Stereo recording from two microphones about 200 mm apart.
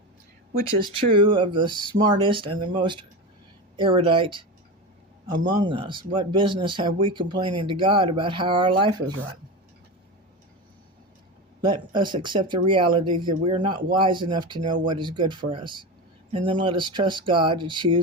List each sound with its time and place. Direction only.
0.9 s speech: 25° right (ahead or behind)
5.6 s speech: 25° right (ahead or behind)
11.6 s speech: 25° right (ahead or behind)